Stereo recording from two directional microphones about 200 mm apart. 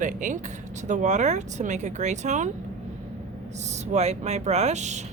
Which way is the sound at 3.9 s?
35° right (ahead or behind).